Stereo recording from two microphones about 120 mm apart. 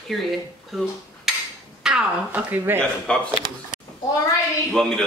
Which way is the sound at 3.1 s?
10° left (ahead or behind).